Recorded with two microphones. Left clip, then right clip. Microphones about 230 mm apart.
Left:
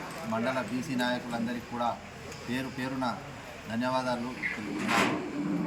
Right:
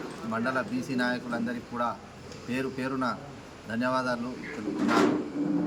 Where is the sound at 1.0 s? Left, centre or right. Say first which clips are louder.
Even; right.